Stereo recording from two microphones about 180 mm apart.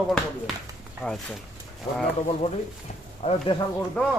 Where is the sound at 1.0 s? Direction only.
15° left (ahead or behind).